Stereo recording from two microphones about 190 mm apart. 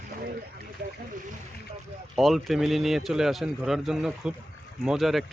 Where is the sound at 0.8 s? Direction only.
50° right (ahead or behind).